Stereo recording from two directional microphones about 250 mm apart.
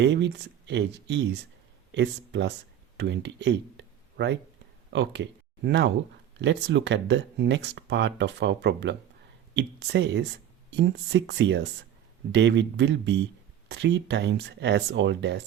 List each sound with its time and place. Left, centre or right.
0.0 s speech: right